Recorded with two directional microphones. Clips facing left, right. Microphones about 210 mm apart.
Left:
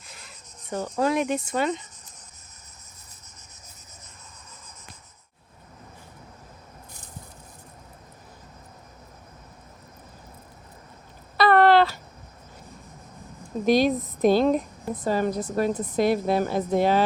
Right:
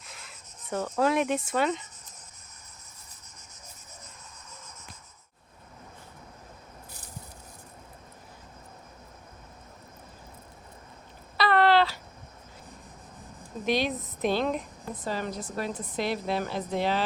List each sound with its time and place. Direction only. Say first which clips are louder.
0.0 s rub: left 1 dB; centre (ahead or behind)
0.9 s speech: left 2 dB; centre (ahead or behind)
11.3 s a sound: left 5 dB; 50° left (ahead or behind)
13.7 s a woman's voice: left 7 dB; 40° left (ahead or behind)